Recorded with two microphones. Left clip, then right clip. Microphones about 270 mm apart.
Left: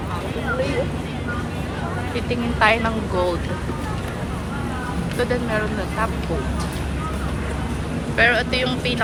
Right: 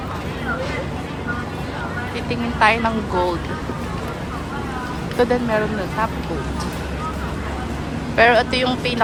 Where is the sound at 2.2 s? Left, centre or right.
Centre.